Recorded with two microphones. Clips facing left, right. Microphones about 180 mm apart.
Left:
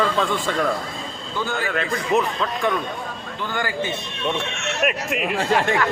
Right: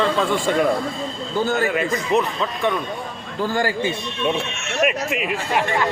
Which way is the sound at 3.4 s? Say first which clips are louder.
Right 6 dB; 35° right (ahead or behind).